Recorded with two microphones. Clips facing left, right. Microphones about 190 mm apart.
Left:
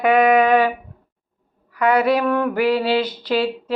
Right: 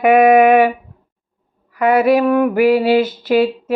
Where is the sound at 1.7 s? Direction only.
25° right (ahead or behind).